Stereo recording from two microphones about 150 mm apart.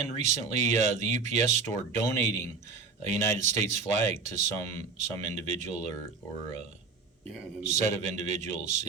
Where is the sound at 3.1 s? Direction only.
50° right (ahead or behind).